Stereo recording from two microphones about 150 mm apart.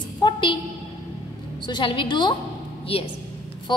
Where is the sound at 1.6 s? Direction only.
30° left (ahead or behind).